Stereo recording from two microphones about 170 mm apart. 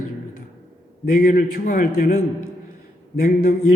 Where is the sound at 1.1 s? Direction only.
55° left (ahead or behind).